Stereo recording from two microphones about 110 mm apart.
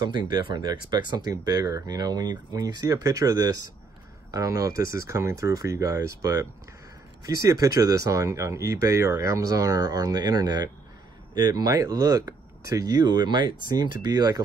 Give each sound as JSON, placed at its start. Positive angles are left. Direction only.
{"t": 0.0, "sound": "speech", "side_deg": -40}